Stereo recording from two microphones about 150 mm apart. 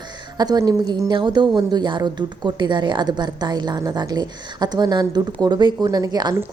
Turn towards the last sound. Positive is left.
turn(degrees=-25)  # may be behind; listen again after turning